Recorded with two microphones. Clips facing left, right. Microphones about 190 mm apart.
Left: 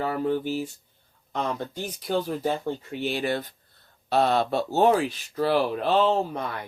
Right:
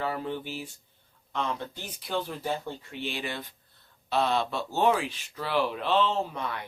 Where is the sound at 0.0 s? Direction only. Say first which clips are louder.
Left 6 dB; 45° left (ahead or behind).